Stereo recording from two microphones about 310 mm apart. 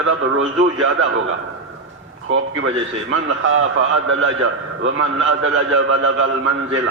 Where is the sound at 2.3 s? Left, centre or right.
Right.